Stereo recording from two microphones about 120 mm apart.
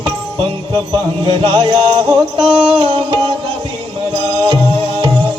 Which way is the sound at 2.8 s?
50° right (ahead or behind).